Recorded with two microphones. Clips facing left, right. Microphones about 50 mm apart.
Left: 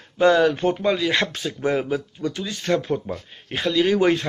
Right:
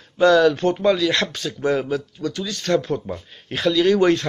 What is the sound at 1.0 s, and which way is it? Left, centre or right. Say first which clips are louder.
A man's voice: right 1 dB; left.